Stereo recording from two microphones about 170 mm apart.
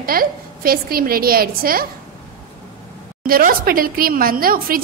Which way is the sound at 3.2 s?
55° right (ahead or behind).